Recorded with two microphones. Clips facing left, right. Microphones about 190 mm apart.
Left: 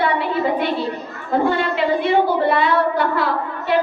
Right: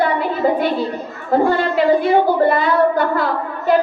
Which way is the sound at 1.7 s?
45° right (ahead or behind).